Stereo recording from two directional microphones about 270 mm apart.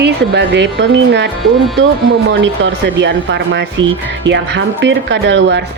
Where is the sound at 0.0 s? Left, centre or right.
Right.